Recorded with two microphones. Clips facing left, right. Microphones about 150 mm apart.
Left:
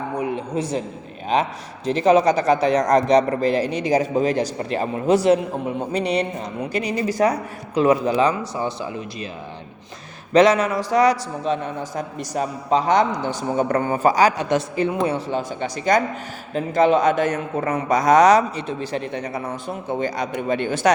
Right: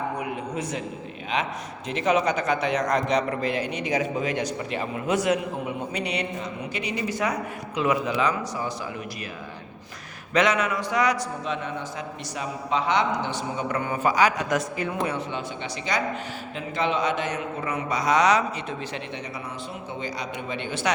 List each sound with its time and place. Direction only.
0.2 s a sound: 30° left (ahead or behind)
1.3 s a man's voice: 35° left (ahead or behind)
10.3 s a man's voice: 35° left (ahead or behind)